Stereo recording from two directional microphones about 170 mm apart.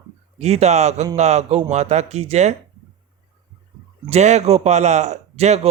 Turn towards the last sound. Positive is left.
turn(degrees=-40)  # may be behind; listen again after turning